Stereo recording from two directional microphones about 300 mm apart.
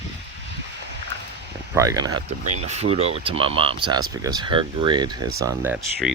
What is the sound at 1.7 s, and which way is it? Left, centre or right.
Speech, centre.